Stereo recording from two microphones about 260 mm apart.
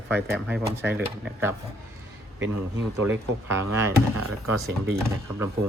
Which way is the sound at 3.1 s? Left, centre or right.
Centre.